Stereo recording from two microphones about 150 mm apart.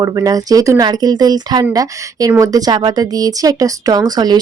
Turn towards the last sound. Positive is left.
turn(degrees=-25)  # may be behind; listen again after turning